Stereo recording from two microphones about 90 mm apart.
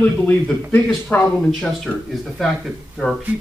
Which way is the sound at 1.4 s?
10° left (ahead or behind).